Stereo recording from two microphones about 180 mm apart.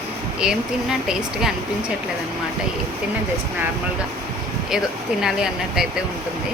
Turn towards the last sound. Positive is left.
turn(degrees=-5)  # may be behind; listen again after turning